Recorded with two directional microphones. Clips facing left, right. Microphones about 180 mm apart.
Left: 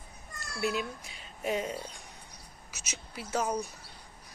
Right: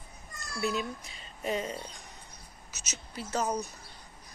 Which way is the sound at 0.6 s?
5° left (ahead or behind).